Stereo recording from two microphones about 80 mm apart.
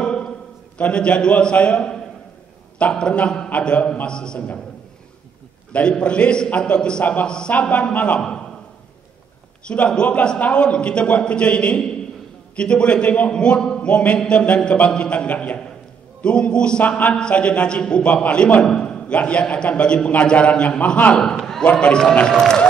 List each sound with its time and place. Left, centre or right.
0.0 s a sound: centre
0.7 s a man's voice: centre
5.7 s a man's voice: centre
9.7 s a man's voice: centre